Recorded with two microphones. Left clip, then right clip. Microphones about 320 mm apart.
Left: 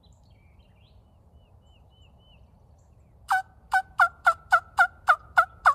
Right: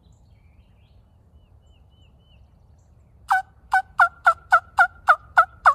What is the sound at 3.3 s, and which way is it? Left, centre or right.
Fowl, centre.